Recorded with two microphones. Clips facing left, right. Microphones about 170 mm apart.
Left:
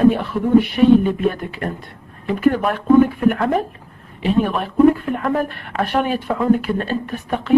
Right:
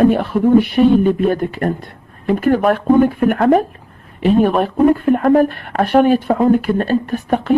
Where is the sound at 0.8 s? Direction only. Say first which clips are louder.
Right 1 dB; 40° right (ahead or behind).